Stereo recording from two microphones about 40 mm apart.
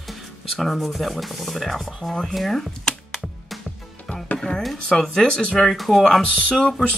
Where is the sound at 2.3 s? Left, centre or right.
Centre.